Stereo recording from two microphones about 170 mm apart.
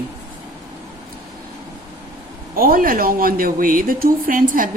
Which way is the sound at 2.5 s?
60° right (ahead or behind).